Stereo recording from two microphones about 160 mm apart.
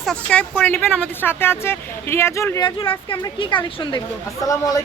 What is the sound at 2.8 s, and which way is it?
Speech, 30° left (ahead or behind).